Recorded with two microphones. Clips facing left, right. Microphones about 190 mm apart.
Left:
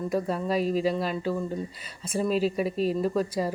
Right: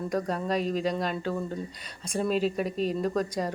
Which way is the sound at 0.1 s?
5° left (ahead or behind).